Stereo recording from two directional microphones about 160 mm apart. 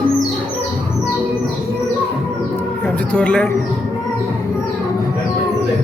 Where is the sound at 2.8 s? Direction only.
5° left (ahead or behind).